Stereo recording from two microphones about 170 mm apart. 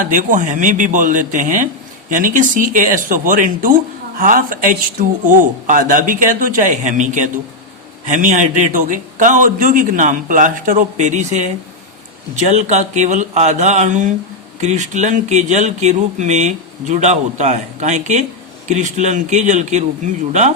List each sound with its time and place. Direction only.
0.1 s speech: 50° right (ahead or behind)